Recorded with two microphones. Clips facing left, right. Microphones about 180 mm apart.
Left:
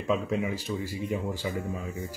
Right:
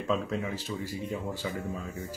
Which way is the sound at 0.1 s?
10° left (ahead or behind).